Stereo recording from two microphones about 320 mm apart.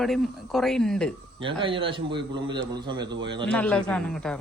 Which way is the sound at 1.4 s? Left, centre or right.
Centre.